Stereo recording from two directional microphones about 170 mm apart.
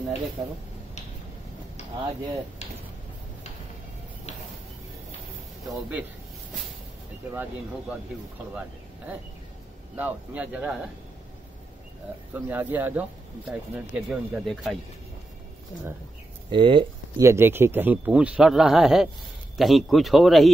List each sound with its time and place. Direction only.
0.4 s speech: 20° right (ahead or behind)
9.9 s speech: 10° right (ahead or behind)
12.4 s speech: 10° right (ahead or behind)
16.4 s speech: 30° right (ahead or behind)
17.2 s speech: 15° right (ahead or behind); by 20.5 s centre (ahead or behind)